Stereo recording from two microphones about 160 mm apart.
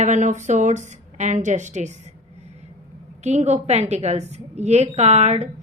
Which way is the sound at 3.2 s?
45° right (ahead or behind).